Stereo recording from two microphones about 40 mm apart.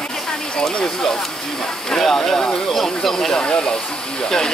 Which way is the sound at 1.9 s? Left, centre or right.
Centre.